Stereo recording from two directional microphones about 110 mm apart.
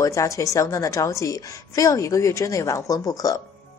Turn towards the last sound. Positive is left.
turn(degrees=30)  # may be behind; listen again after turning